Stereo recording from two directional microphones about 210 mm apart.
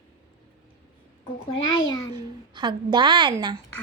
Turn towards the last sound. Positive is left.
turn(degrees=-20)  # may be behind; listen again after turning